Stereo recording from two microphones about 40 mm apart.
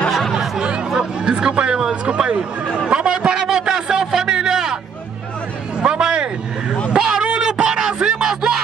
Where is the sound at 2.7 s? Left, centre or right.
Centre.